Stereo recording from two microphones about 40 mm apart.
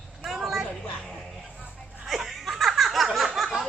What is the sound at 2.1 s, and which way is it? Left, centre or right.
Laughter, centre.